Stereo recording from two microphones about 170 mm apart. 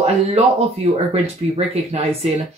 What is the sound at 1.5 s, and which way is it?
Speech, 35° right (ahead or behind).